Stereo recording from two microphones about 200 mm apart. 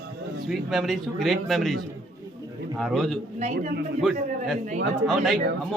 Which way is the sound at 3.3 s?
35° right (ahead or behind).